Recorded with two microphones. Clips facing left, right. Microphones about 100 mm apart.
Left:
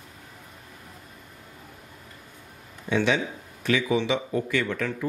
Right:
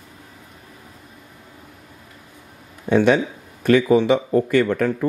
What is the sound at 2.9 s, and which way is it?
Speech, 50° right (ahead or behind).